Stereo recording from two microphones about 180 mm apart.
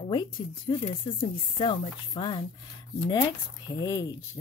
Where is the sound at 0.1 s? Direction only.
25° left (ahead or behind).